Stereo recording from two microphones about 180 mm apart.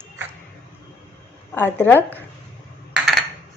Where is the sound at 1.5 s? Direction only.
10° left (ahead or behind).